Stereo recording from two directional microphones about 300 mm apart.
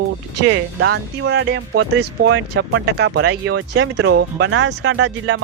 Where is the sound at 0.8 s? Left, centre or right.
Right.